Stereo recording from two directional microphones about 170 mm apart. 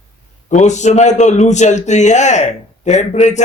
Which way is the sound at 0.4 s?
45° left (ahead or behind).